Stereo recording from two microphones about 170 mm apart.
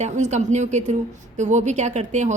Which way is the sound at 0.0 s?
45° right (ahead or behind).